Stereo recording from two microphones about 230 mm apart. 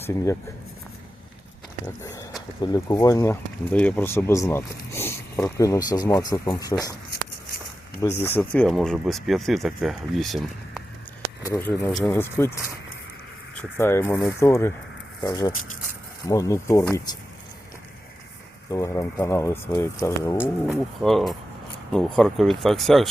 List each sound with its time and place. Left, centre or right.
2.6 s speech: centre
8.0 s speech: centre
11.4 s speech: centre
13.6 s speech: centre
18.7 s speech: centre
20.7 s speech: centre